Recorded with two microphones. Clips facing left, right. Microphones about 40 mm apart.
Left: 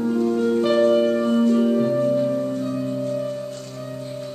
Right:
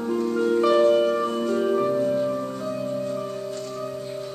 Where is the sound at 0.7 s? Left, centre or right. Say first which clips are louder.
Left 1 dB; centre.